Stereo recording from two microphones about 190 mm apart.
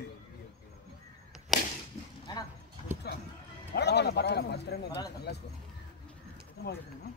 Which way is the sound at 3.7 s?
60° left (ahead or behind).